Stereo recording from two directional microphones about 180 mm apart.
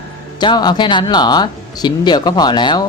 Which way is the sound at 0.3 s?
25° left (ahead or behind).